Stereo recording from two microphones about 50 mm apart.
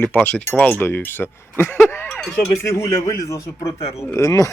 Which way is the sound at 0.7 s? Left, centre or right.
Left.